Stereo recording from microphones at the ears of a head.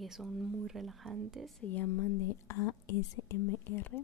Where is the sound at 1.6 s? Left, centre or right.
Left.